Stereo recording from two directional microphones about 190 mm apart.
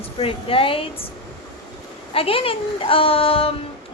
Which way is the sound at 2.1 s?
30° left (ahead or behind).